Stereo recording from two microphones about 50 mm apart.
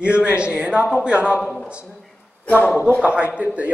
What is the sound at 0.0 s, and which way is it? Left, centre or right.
Speech, right.